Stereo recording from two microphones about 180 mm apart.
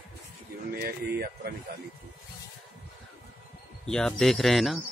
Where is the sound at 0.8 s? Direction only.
55° right (ahead or behind).